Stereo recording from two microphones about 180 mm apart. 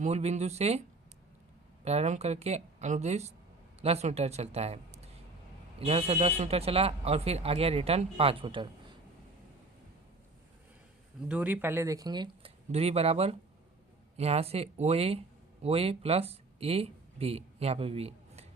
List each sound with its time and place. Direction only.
0.0 s speech: 35° right (ahead or behind)
1.8 s speech: 35° right (ahead or behind)
11.3 s speech: 10° right (ahead or behind); by 18.4 s 35° right (ahead or behind)